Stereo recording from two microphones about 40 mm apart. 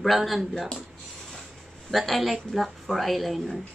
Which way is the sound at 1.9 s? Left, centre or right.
Centre.